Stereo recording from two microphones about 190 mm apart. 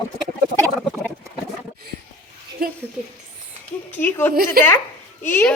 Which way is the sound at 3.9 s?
10° left (ahead or behind).